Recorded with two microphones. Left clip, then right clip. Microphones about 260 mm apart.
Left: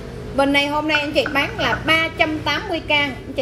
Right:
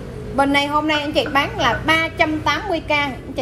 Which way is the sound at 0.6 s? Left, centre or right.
Centre.